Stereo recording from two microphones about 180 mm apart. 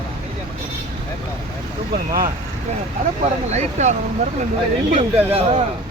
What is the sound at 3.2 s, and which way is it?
Speech, 40° right (ahead or behind).